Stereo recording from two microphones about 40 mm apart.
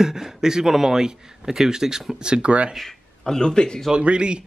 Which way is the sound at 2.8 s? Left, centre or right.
Centre.